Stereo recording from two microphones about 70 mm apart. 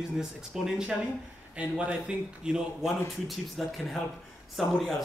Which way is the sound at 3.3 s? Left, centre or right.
Centre.